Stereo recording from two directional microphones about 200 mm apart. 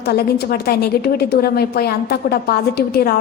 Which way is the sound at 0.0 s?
55° left (ahead or behind).